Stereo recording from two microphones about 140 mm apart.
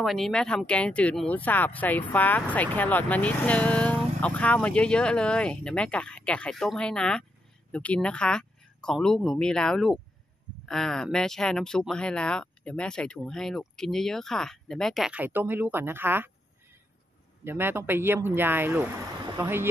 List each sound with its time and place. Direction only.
0.0 s speech: centre (ahead or behind)
15.1 s speech: 15° right (ahead or behind)
17.5 s speech: 15° right (ahead or behind)